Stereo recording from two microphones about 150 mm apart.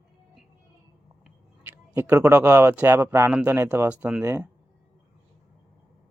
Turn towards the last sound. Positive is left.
turn(degrees=-15)  # may be behind; listen again after turning